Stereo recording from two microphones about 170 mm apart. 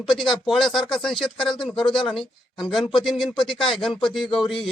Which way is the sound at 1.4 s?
30° left (ahead or behind).